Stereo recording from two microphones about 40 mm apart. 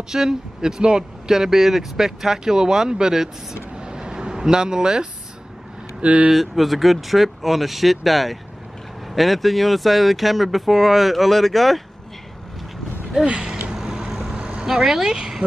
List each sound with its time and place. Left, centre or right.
0.1 s speech: centre
3.7 s vehicle: right
5.9 s speech: right
6.3 s speech: centre
13.2 s speech: right
13.7 s vehicle: centre
14.3 s vehicle: right
14.7 s speech: centre